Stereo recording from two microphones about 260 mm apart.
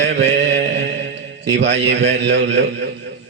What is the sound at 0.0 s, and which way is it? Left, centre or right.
Speech, right.